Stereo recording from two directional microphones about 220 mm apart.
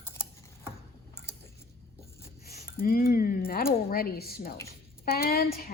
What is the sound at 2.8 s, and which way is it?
A woman's voice, 40° left (ahead or behind).